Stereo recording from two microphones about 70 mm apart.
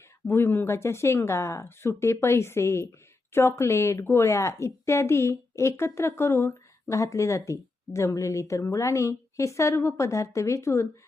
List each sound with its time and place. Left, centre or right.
0.3 s a woman's voice: left